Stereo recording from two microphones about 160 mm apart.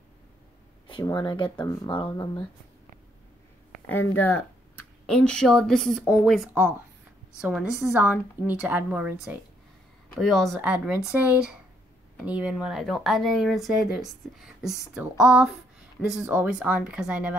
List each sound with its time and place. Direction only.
0.8 s speech: 30° left (ahead or behind)
3.8 s speech: 10° left (ahead or behind)
7.5 s a woman's voice: 5° right (ahead or behind)